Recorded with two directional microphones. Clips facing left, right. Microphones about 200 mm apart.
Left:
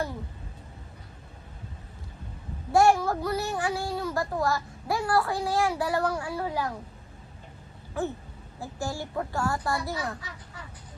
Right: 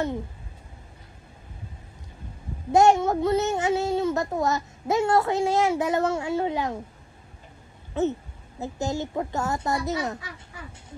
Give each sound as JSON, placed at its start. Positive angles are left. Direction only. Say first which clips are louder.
{"t": 2.7, "sound": "speech", "louder": "right 3 dB", "side_deg": -20}
{"t": 8.0, "sound": "speech", "louder": "right 6 dB", "side_deg": -20}